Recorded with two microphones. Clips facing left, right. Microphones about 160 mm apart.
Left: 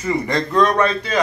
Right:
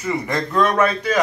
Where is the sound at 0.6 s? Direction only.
10° right (ahead or behind).